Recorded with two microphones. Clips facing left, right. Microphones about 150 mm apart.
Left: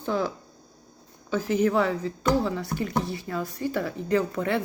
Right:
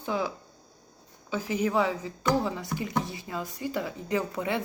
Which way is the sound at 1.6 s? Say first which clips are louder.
Left 1 dB; 15° right (ahead or behind).